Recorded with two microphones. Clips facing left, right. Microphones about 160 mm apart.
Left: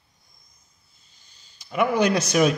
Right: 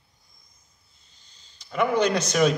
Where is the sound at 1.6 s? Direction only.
10° left (ahead or behind).